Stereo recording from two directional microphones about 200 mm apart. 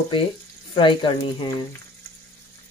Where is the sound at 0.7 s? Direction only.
25° left (ahead or behind).